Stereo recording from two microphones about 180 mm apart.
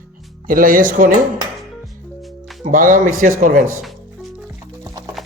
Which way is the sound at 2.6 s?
45° right (ahead or behind).